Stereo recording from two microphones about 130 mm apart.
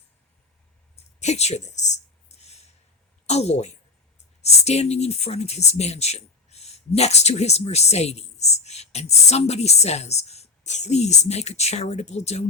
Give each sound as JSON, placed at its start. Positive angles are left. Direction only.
{"t": 1.2, "sound": "speech", "side_deg": 60}
{"t": 2.4, "sound": "a sound", "side_deg": 55}
{"t": 3.2, "sound": "speech", "side_deg": 55}